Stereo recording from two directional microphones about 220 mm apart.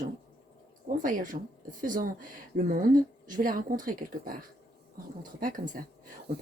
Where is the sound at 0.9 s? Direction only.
40° right (ahead or behind).